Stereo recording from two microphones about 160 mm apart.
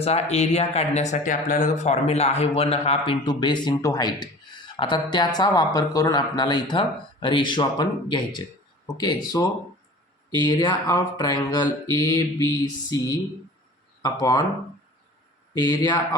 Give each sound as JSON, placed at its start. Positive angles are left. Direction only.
{"t": 0.0, "sound": "speech", "side_deg": 40}
{"t": 1.1, "sound": "a man's voice", "side_deg": 55}
{"t": 15.5, "sound": "a man's voice", "side_deg": 20}